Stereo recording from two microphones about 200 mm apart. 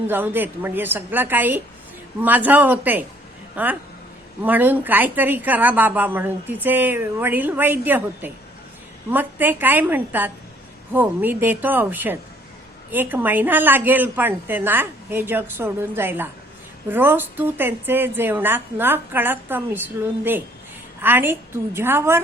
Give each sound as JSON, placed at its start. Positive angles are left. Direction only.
{"t": 0.1, "sound": "a woman's voice", "side_deg": -10}